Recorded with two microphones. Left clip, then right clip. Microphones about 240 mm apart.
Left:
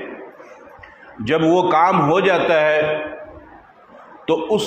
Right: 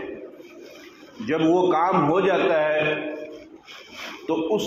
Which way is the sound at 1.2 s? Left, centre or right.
Left.